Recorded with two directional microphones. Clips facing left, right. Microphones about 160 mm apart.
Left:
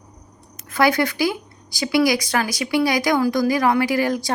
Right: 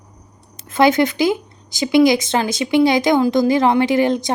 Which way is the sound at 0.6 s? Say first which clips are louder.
Right 4 dB; 25° right (ahead or behind).